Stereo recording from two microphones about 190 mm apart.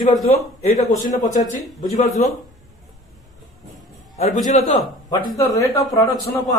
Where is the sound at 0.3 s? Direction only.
35° left (ahead or behind).